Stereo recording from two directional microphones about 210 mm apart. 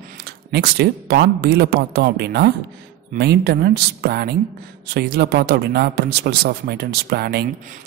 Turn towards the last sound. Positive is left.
turn(degrees=-50)  # may be behind; listen again after turning